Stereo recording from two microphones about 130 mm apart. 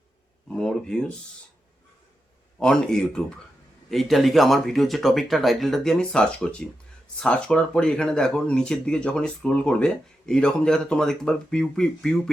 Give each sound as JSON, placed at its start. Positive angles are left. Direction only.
{"t": 0.5, "sound": "speech", "side_deg": 5}
{"t": 2.6, "sound": "speech", "side_deg": 5}